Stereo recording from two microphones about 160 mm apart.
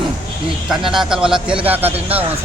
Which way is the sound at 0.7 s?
Centre (ahead or behind).